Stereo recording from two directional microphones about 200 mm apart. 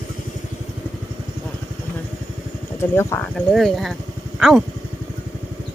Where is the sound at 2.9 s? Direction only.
10° left (ahead or behind).